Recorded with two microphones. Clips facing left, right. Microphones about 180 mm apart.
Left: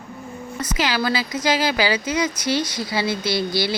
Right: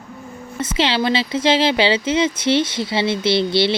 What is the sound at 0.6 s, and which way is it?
Speech, 25° right (ahead or behind).